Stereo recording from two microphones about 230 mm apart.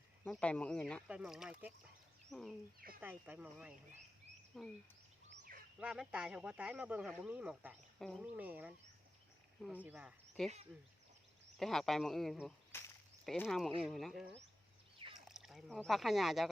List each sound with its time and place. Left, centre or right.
0.3 s speech: centre
5.3 s a sound: right
5.8 s speech: centre
11.5 s speech: centre